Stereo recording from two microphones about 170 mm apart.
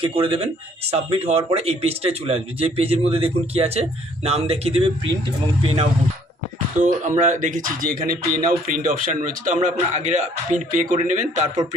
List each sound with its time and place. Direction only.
0.0 s a man's voice: 30° right (ahead or behind)
6.7 s speech: 45° right (ahead or behind)